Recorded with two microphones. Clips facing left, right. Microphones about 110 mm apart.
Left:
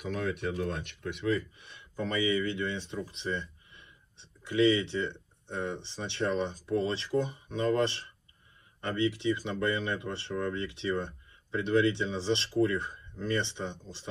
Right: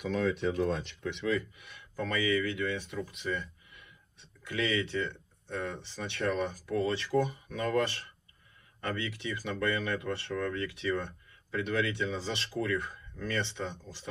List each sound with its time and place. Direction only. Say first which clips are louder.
0.0 s speech: right 3 dB; 50° left (ahead or behind)
1.6 s speech: left 1 dB; 25° left (ahead or behind)